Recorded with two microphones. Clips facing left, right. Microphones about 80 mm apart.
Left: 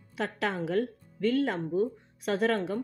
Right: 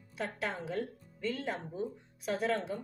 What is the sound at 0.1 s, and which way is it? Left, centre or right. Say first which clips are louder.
Speech: left 6 dB; left.